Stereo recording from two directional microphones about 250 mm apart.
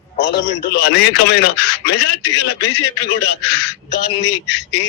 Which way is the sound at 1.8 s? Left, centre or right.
Left.